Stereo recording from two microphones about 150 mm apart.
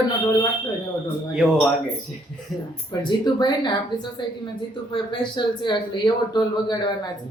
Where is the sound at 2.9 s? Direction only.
30° left (ahead or behind).